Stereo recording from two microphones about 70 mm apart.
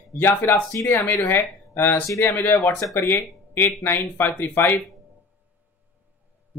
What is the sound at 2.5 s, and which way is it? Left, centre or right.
Speech, left.